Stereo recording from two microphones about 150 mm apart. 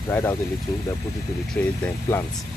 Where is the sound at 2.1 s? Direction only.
15° left (ahead or behind).